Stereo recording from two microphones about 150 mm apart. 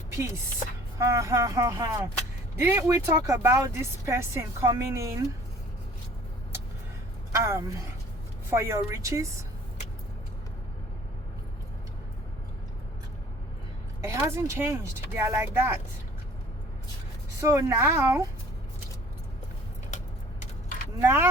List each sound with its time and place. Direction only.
0.9 s speech: 20° right (ahead or behind)
7.3 s speech: 20° right (ahead or behind)
14.0 s speech: 20° right (ahead or behind)
17.4 s speech: 20° right (ahead or behind)
21.0 s speech: 15° right (ahead or behind)